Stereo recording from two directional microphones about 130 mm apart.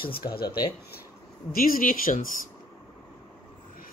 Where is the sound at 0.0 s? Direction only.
35° left (ahead or behind).